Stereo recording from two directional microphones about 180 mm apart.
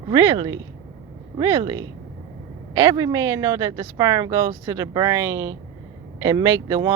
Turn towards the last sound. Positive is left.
turn(degrees=-20)  # may be behind; listen again after turning